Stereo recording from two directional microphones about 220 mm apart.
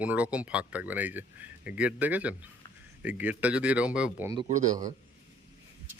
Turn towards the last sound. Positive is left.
turn(degrees=-35)  # may be behind; listen again after turning